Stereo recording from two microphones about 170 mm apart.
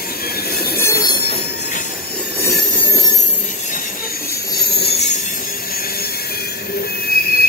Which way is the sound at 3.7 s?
55° left (ahead or behind).